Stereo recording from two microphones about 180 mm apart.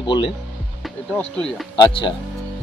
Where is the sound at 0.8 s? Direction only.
5° left (ahead or behind).